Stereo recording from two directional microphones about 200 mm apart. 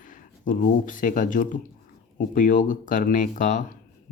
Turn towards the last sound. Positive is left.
turn(degrees=40)  # may be behind; listen again after turning